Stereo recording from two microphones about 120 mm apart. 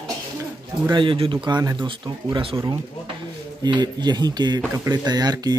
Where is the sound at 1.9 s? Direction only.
45° right (ahead or behind).